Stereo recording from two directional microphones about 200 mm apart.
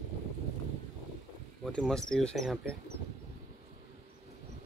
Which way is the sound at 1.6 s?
5° left (ahead or behind).